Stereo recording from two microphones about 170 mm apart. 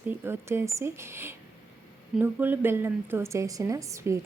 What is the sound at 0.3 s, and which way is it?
A woman's voice, 15° right (ahead or behind).